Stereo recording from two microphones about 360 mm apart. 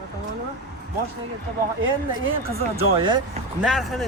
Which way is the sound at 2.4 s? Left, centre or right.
Centre.